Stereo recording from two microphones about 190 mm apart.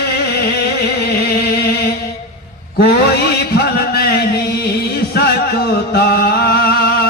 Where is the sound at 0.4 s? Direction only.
55° left (ahead or behind).